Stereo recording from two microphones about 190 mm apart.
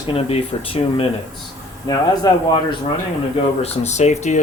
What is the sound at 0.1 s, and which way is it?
Speech, 30° left (ahead or behind).